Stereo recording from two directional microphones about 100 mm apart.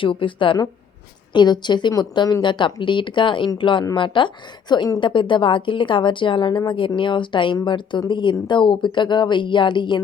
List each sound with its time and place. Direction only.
0.0 s a woman's voice: 60° left (ahead or behind)